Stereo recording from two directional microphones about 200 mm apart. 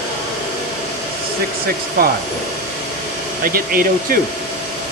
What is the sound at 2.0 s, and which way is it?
Speech, 45° right (ahead or behind).